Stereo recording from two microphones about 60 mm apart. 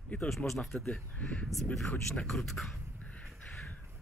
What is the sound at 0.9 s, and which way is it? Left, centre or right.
Speech, left.